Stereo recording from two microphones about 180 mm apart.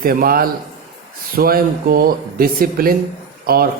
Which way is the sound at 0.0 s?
55° right (ahead or behind).